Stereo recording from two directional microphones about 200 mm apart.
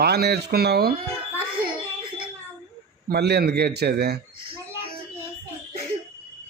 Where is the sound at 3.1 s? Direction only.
55° right (ahead or behind).